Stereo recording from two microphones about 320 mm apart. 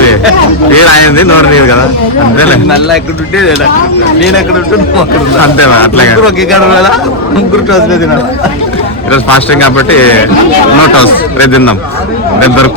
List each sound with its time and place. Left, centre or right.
0.7 s a man's voice: left
2.6 s speech: centre
5.5 s a man's voice: left
11.0 s a man's voice: left